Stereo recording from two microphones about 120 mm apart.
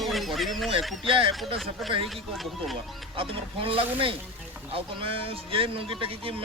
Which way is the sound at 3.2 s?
50° right (ahead or behind).